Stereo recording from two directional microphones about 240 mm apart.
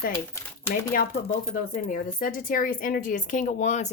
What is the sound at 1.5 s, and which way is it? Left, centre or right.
Speech, left.